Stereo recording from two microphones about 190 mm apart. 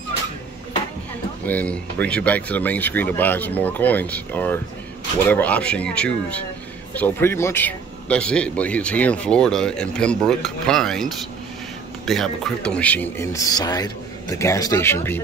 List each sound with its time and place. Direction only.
1.4 s speech: 10° left (ahead or behind)